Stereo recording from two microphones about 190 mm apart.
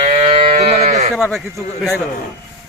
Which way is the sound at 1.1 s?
Centre (ahead or behind).